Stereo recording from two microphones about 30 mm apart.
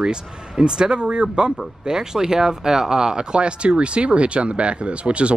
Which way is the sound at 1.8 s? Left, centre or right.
Right.